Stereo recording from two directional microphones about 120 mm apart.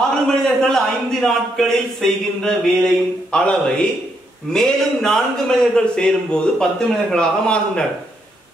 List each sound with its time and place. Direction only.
0.4 s speech: 5° left (ahead or behind)